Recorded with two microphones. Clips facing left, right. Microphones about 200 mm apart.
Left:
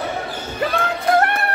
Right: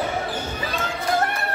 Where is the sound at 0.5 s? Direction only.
65° left (ahead or behind).